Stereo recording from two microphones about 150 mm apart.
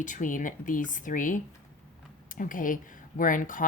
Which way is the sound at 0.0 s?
60° left (ahead or behind).